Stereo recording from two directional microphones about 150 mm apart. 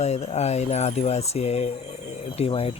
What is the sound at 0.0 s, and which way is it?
A man's voice, 45° left (ahead or behind).